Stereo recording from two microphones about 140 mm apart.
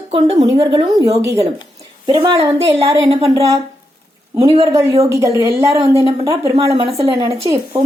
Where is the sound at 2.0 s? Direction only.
35° right (ahead or behind).